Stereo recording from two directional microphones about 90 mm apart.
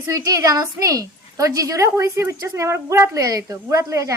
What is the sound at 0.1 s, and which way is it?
A woman's voice, 40° right (ahead or behind).